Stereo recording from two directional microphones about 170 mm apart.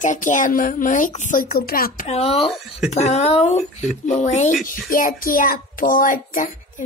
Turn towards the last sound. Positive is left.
turn(degrees=55)  # may be behind; listen again after turning